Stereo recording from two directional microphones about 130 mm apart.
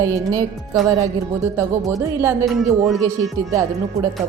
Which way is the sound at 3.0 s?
25° right (ahead or behind).